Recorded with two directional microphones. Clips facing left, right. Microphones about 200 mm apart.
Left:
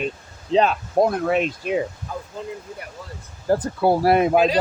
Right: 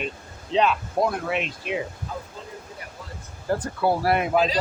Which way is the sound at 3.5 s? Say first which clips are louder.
Left 5 dB; 35° left (ahead or behind).